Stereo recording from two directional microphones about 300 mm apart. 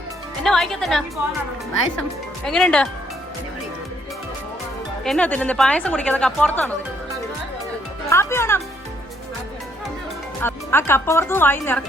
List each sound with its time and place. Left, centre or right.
0.4 s a woman's voice: centre
2.5 s a woman's voice: centre
5.0 s a woman's voice: centre
8.1 s speech: centre
10.4 s speech: centre